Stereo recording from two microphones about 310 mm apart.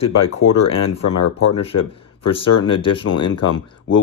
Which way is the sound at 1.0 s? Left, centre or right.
Left.